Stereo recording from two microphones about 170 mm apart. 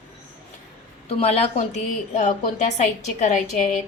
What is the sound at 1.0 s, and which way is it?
A woman's voice, 35° left (ahead or behind).